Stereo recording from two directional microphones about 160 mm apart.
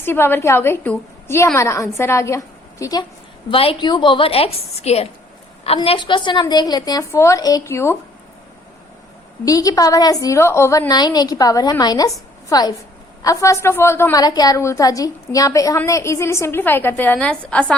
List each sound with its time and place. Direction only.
0.0 s a woman's voice: 15° left (ahead or behind)
3.5 s a woman's voice: 35° left (ahead or behind); by 7.9 s 15° left (ahead or behind)
9.4 s a woman's voice: 20° left (ahead or behind)